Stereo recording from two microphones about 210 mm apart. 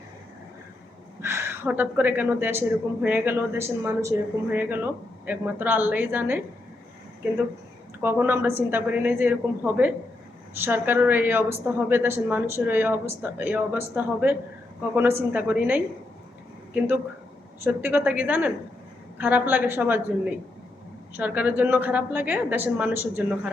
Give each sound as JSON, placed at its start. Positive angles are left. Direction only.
{"t": 1.2, "sound": "a woman's voice", "side_deg": -10}
{"t": 8.0, "sound": "a woman's voice", "side_deg": -10}
{"t": 17.6, "sound": "a woman's voice", "side_deg": -10}